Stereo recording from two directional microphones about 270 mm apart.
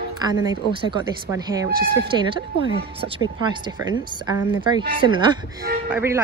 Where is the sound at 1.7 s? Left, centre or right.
Right.